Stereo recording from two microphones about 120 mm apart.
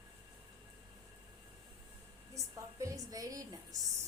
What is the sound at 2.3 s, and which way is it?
A woman's voice, 25° right (ahead or behind).